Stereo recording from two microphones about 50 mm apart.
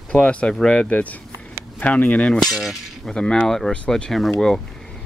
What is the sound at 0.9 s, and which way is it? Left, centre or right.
Speech, left.